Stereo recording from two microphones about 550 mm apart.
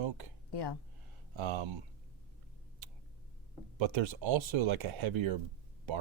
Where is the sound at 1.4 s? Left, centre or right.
Right.